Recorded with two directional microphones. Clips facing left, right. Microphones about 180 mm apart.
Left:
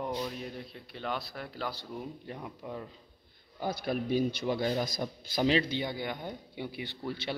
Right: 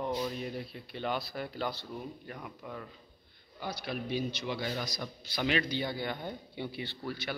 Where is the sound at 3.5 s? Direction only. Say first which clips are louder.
Left 5 dB; 45° left (ahead or behind).